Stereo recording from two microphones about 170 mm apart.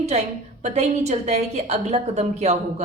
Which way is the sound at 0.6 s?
40° right (ahead or behind).